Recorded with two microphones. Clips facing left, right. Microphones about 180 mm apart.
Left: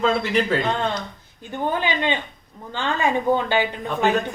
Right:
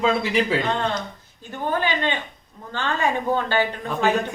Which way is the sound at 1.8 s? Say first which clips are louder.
Left 1 dB; 15° left (ahead or behind).